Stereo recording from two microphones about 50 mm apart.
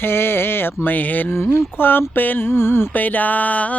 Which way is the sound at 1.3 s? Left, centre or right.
Left.